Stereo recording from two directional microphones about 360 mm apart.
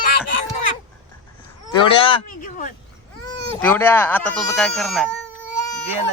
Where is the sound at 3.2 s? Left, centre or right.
Centre.